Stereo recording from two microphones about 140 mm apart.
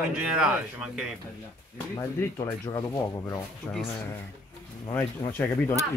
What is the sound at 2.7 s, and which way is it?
Speech, 25° left (ahead or behind).